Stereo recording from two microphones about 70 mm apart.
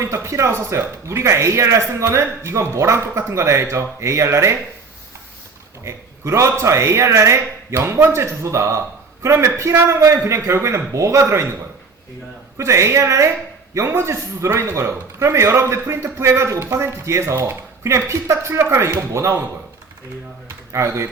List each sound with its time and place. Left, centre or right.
0.0 s a man's voice: right
5.8 s a man's voice: right
12.5 s a man's voice: right
20.7 s a man's voice: right